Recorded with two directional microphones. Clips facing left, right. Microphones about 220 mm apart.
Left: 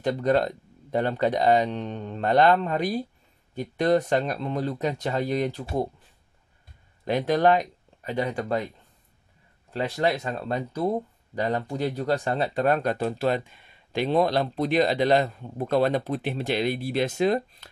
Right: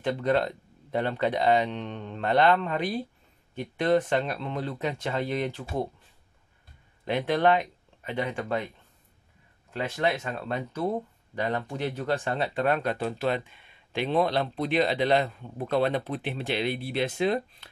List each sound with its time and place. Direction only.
0.0 s speech: 40° left (ahead or behind)
7.1 s speech: 40° left (ahead or behind)
9.7 s speech: 35° left (ahead or behind)